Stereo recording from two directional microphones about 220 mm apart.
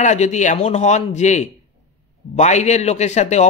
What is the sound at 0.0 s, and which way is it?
A man's voice, 30° left (ahead or behind).